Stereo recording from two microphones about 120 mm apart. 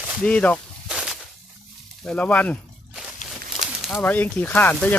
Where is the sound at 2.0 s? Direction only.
10° left (ahead or behind).